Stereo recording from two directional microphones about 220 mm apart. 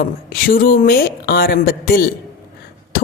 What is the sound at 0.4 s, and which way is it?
A woman's voice, 40° left (ahead or behind).